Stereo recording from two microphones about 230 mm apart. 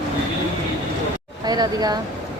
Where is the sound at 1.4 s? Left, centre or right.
Centre.